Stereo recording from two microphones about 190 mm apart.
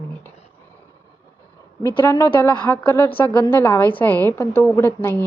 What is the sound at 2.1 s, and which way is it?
A woman's voice, 15° left (ahead or behind).